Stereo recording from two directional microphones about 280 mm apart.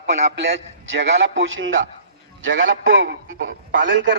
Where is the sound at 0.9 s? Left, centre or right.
Right.